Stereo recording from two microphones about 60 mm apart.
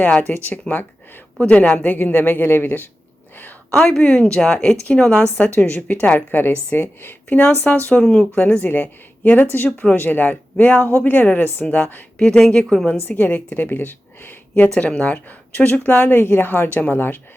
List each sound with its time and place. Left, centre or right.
0.0 s speech: left
0.7 s a woman's voice: centre
2.0 s a woman's voice: left
3.7 s a woman's voice: centre
5.5 s a woman's voice: left
7.3 s a woman's voice: left
8.6 s a woman's voice: left
9.6 s a woman's voice: centre
10.0 s speech: left
12.2 s a woman's voice: centre
13.1 s a woman's voice: left
14.8 s speech: centre
15.9 s a woman's voice: left